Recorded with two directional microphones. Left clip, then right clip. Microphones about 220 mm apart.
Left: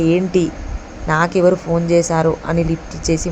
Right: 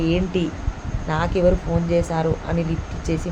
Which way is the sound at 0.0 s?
25° left (ahead or behind).